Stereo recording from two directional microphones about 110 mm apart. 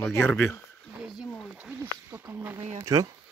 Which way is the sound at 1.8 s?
20° right (ahead or behind).